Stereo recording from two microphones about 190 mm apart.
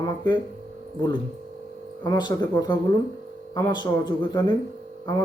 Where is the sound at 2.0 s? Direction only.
20° left (ahead or behind).